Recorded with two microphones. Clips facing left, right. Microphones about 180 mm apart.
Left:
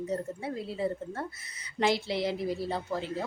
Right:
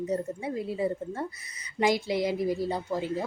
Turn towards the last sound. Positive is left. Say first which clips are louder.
# right 3 dB
turn(degrees=-15)  # may be behind; listen again after turning